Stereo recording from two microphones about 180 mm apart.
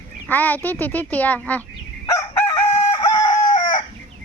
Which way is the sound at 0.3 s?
10° left (ahead or behind).